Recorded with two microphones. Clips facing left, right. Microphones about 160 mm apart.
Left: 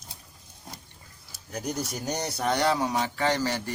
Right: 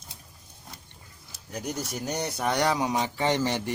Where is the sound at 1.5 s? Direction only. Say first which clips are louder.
Left 1 dB; 5° right (ahead or behind).